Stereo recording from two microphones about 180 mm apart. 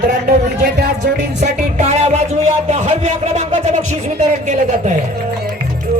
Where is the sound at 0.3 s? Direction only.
55° right (ahead or behind).